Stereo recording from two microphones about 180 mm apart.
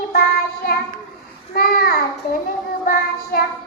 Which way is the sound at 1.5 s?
55° left (ahead or behind).